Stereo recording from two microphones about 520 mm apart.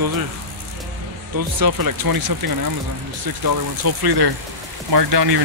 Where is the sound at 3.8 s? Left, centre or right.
Right.